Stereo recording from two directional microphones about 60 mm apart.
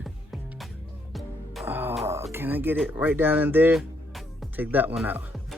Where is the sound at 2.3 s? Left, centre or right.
Right.